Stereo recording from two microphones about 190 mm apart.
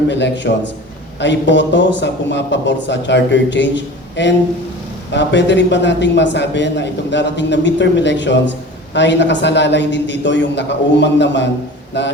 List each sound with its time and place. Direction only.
0.1 s a man's voice: 65° left (ahead or behind)